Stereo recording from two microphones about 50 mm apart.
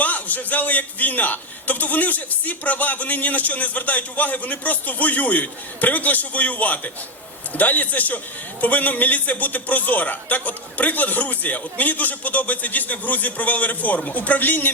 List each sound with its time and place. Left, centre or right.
0.0 s a man's voice: left